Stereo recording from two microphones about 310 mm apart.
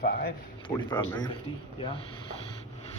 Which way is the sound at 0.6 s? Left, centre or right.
Centre.